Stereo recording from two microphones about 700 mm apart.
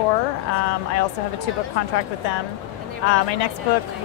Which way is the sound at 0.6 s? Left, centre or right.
Left.